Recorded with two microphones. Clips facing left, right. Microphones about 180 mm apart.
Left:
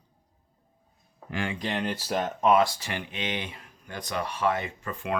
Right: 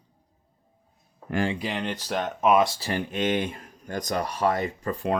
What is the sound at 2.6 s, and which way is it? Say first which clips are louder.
Speech: right 4 dB; 35° right (ahead or behind).